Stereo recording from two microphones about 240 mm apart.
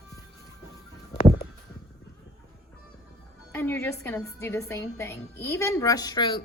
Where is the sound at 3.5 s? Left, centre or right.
Centre.